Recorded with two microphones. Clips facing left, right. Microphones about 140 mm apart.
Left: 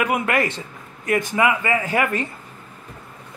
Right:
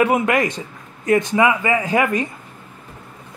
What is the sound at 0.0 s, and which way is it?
A man's voice, 25° right (ahead or behind).